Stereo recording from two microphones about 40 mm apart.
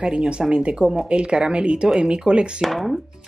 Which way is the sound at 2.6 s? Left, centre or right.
Centre.